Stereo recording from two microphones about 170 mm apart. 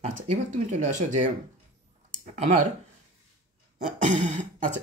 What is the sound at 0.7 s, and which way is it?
Speech, 45° right (ahead or behind).